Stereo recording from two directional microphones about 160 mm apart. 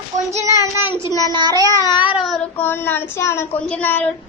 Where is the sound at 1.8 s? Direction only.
30° left (ahead or behind).